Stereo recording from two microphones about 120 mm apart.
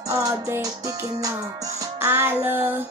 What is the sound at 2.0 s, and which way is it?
Music, 20° right (ahead or behind).